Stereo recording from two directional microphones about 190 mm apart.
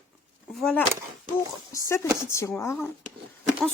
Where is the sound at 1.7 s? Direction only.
15° left (ahead or behind).